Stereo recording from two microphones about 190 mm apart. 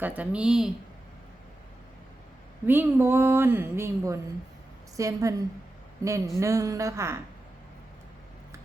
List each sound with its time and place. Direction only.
0.0 s speech: 10° right (ahead or behind)
2.6 s a woman's voice: 10° right (ahead or behind)